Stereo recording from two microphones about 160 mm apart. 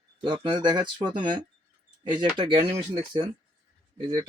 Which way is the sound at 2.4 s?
30° right (ahead or behind).